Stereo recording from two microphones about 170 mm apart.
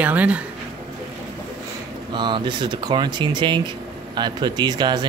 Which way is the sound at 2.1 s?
25° right (ahead or behind).